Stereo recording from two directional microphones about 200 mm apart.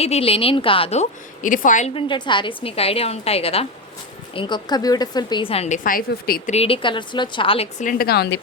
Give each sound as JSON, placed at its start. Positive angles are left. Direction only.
{"t": 0.0, "sound": "a woman's voice", "side_deg": 30}
{"t": 6.5, "sound": "a woman's voice", "side_deg": 30}